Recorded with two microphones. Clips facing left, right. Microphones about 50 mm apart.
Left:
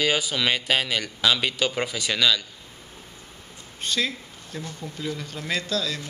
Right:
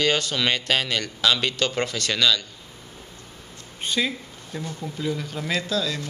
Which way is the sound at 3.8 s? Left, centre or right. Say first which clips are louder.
Right 1 dB; centre.